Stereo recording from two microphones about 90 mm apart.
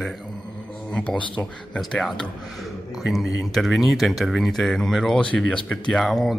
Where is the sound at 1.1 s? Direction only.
65° left (ahead or behind).